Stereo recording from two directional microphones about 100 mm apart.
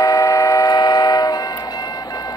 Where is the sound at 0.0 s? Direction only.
35° left (ahead or behind).